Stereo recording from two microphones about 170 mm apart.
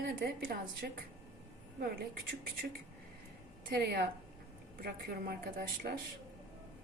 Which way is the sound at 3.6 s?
65° right (ahead or behind).